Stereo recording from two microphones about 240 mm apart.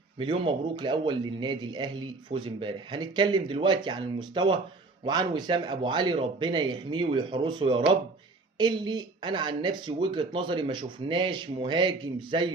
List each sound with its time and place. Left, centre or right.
0.2 s a man's voice: centre